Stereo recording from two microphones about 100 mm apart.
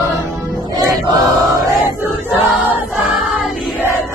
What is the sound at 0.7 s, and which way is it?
Choir, 40° right (ahead or behind).